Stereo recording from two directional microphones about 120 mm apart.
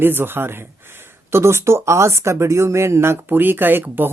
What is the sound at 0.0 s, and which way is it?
Speech, 15° right (ahead or behind).